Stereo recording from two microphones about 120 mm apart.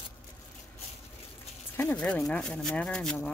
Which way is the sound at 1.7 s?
15° left (ahead or behind).